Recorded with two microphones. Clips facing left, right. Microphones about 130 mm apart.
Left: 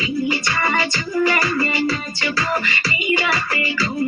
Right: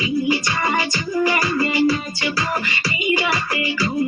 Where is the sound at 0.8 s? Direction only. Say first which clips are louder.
Even; 15° right (ahead or behind).